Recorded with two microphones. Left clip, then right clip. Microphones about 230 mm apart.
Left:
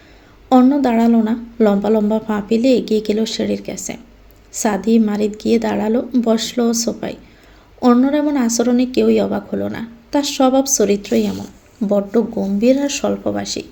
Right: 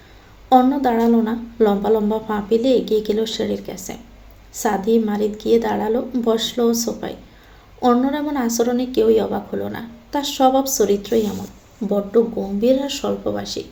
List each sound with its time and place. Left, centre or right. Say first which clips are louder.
0.5 s a woman's voice: left 1 dB; left